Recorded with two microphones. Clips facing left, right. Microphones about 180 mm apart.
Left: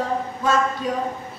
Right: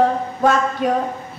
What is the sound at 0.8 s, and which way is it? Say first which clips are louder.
Speech: right 6 dB; 65° right (ahead or behind).